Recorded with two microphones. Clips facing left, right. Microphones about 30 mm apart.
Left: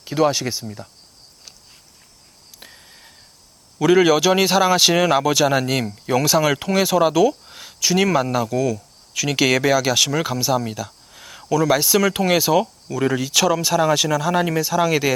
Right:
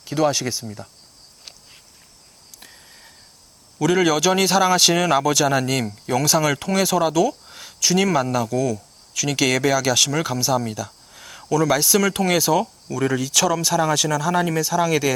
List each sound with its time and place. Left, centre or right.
0.0 s speech: centre
0.6 s cricket: centre
2.6 s a sound: centre
3.8 s speech: centre